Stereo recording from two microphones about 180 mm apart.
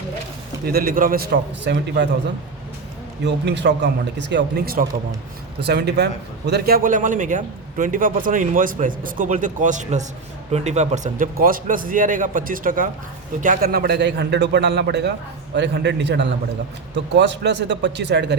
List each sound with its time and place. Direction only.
0.6 s speech: 55° right (ahead or behind)
3.2 s a man's voice: 70° right (ahead or behind); by 4.9 s 55° right (ahead or behind)
5.5 s a man's voice: 70° right (ahead or behind)
15.5 s a man's voice: 80° right